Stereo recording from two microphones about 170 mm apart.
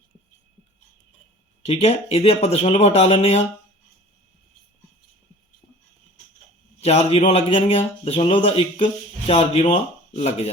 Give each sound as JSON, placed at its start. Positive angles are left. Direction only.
{"t": 1.6, "sound": "speech", "side_deg": 40}
{"t": 6.8, "sound": "speech", "side_deg": 35}